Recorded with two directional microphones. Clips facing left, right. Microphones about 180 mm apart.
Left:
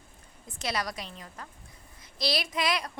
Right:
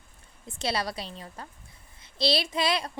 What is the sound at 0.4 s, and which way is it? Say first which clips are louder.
A woman's voice: right 3 dB; 30° right (ahead or behind).